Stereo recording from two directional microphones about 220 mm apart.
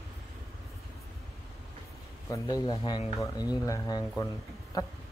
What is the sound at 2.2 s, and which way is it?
A man's voice, 15° left (ahead or behind).